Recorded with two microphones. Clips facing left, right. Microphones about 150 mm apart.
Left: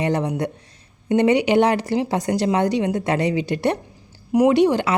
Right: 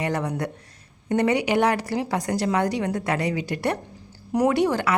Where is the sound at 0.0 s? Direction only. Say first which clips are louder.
Left 4 dB; 20° left (ahead or behind).